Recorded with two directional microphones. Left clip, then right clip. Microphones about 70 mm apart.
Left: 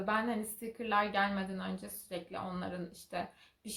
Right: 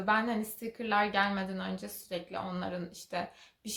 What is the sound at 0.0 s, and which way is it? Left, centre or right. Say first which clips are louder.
Speech: right 4 dB; right.